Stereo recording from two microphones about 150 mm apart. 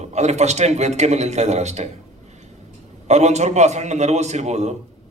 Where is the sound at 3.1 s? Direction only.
50° right (ahead or behind).